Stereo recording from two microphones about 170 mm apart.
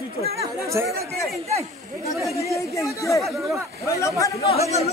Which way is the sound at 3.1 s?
Centre (ahead or behind).